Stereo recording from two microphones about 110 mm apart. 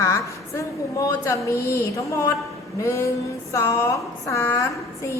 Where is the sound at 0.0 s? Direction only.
30° left (ahead or behind).